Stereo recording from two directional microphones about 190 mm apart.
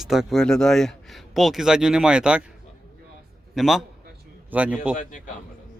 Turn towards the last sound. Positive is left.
turn(degrees=40)  # may be behind; listen again after turning